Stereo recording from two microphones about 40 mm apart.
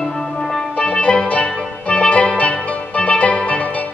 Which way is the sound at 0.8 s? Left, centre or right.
Left.